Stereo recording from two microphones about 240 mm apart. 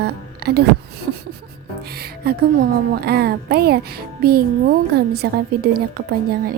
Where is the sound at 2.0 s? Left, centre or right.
Right.